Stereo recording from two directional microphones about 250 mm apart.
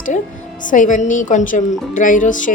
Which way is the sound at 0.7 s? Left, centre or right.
Left.